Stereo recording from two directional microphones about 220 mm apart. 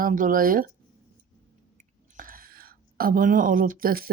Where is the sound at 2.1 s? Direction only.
40° right (ahead or behind).